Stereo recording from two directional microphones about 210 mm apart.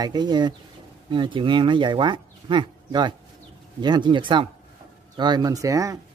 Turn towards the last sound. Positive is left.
turn(degrees=-15)  # may be behind; listen again after turning